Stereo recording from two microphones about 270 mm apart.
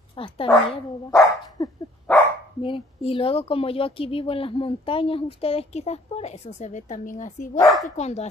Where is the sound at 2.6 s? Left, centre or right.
Centre.